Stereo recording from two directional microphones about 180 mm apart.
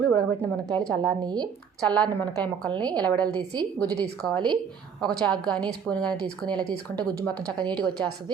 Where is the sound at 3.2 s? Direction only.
20° right (ahead or behind).